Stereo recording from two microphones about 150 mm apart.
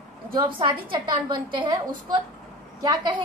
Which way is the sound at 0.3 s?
35° right (ahead or behind).